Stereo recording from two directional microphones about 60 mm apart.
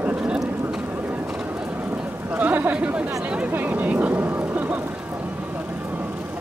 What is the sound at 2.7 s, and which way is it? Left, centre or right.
Speech, centre.